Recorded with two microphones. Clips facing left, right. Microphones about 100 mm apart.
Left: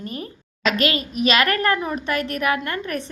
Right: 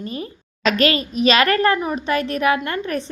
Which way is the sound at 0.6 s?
35° right (ahead or behind).